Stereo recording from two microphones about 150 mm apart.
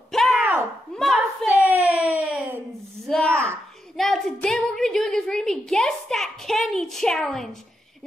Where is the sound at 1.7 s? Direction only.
10° right (ahead or behind).